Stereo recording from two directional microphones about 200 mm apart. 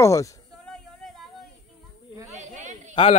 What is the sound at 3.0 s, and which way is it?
Speech, 25° left (ahead or behind).